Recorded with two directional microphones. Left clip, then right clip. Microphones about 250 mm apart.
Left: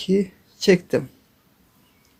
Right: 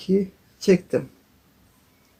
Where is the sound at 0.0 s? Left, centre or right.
Left.